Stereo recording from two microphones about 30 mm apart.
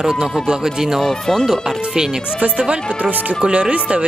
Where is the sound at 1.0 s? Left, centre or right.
Centre.